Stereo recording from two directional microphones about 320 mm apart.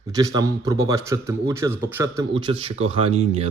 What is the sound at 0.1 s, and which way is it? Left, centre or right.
A man's voice, centre.